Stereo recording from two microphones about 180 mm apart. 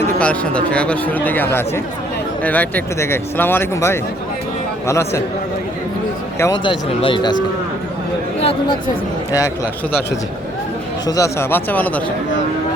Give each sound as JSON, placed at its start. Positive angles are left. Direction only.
{"t": 0.2, "sound": "speech", "side_deg": 5}
{"t": 6.4, "sound": "speech", "side_deg": 25}
{"t": 8.4, "sound": "speech", "side_deg": 30}
{"t": 11.0, "sound": "speech", "side_deg": 20}